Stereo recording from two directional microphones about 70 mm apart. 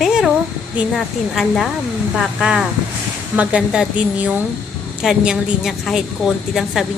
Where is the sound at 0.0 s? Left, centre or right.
Centre.